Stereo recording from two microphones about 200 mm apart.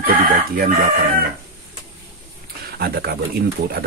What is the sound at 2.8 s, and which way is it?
Speech, 50° right (ahead or behind).